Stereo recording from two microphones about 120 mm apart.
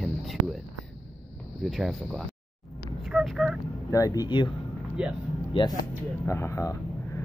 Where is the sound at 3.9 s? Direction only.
30° left (ahead or behind).